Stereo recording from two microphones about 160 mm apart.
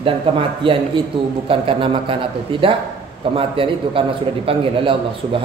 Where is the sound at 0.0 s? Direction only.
35° right (ahead or behind).